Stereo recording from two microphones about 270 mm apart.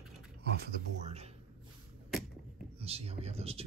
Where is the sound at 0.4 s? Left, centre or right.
Right.